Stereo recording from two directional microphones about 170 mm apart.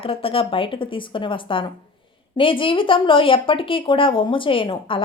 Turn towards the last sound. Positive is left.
turn(degrees=30)  # may be behind; listen again after turning